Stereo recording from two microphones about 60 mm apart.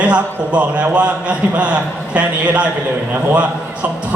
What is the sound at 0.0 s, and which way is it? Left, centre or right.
A man's voice, right.